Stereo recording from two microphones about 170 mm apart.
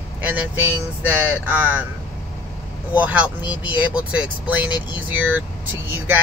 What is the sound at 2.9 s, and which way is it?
Speech, 10° right (ahead or behind).